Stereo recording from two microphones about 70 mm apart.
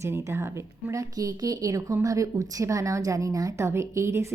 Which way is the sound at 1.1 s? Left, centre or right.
Right.